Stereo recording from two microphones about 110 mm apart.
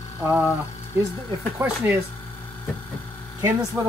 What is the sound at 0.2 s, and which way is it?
Speech, 10° right (ahead or behind).